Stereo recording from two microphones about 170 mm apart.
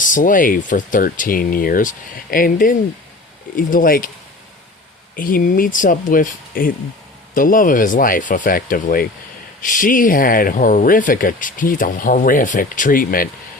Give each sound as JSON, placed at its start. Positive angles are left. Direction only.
{"t": 0.0, "sound": "speech", "side_deg": 50}
{"t": 5.1, "sound": "speech", "side_deg": 55}